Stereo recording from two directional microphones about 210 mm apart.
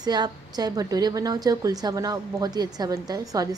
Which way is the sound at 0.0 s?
20° right (ahead or behind).